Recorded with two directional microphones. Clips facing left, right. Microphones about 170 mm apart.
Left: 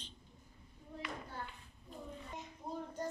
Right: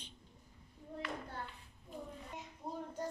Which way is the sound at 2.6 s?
10° right (ahead or behind).